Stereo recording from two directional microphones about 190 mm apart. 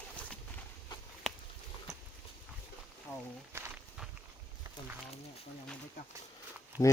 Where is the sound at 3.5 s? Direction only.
15° right (ahead or behind).